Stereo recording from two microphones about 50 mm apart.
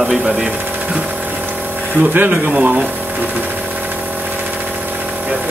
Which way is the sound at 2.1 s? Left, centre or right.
Right.